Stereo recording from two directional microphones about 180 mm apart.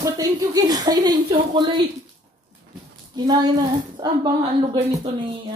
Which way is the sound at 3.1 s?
25° right (ahead or behind).